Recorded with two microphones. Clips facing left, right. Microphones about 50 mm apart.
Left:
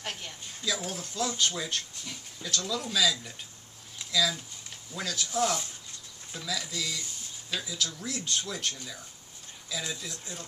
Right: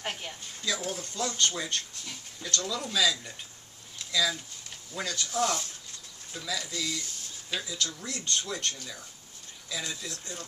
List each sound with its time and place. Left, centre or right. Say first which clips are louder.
0.0 s speech: right 2 dB; centre
0.6 s speech: even; centre